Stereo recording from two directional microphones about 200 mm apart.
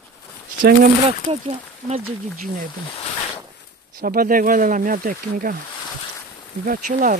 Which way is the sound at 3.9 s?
45° right (ahead or behind).